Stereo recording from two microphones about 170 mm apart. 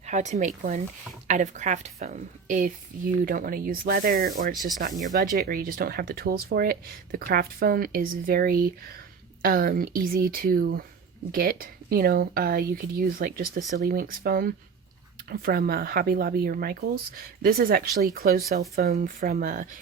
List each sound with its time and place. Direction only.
0.0 s a woman's voice: 45° right (ahead or behind); by 18.6 s 65° right (ahead or behind)
18.8 s speech: 55° right (ahead or behind)